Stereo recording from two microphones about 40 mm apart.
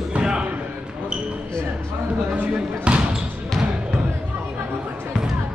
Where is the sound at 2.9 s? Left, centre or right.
Right.